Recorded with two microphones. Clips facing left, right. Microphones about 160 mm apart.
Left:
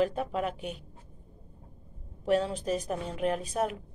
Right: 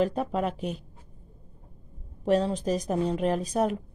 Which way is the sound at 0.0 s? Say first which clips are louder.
Right 2 dB; 40° right (ahead or behind).